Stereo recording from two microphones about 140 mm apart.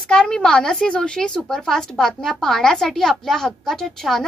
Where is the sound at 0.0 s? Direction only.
5° left (ahead or behind).